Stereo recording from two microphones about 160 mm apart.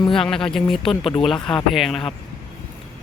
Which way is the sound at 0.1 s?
5° left (ahead or behind).